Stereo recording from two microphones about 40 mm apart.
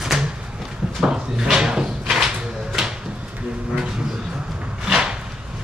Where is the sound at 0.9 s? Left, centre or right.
Centre.